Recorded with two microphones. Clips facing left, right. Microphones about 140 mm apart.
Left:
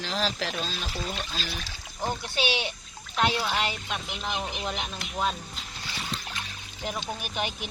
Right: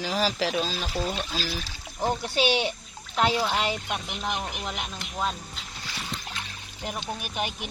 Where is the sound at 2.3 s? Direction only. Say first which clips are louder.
Right 5 dB; 40° right (ahead or behind).